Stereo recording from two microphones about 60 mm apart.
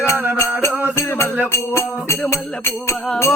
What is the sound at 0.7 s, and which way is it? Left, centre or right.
Music, right.